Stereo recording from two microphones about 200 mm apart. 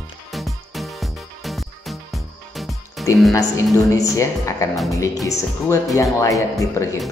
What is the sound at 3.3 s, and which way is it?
A woman's voice, 15° left (ahead or behind).